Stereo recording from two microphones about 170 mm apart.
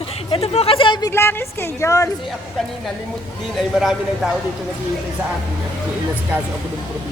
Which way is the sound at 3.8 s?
Centre (ahead or behind).